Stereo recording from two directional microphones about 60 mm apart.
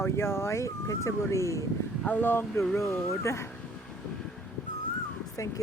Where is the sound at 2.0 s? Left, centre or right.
Left.